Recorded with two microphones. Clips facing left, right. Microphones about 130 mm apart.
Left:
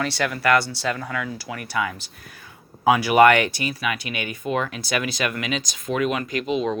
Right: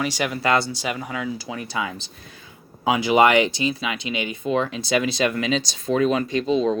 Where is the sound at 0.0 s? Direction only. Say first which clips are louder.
Even; 15° right (ahead or behind).